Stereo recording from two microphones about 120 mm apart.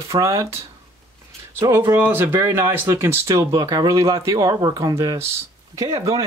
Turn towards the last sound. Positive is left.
turn(degrees=-25)  # may be behind; listen again after turning